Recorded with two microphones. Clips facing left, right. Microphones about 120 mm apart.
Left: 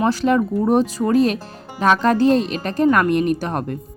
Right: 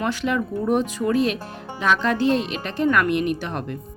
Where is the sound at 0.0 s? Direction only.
35° left (ahead or behind).